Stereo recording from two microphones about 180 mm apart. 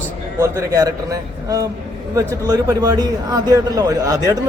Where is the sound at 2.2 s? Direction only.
20° right (ahead or behind).